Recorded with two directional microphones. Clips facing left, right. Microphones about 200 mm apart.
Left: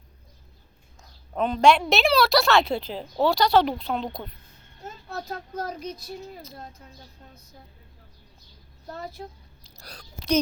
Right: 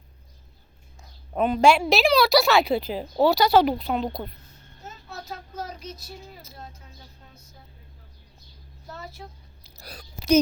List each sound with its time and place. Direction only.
1.3 s a woman's voice: 10° right (ahead or behind)
5.0 s speech: 55° left (ahead or behind)
9.6 s chewing: 5° right (ahead or behind)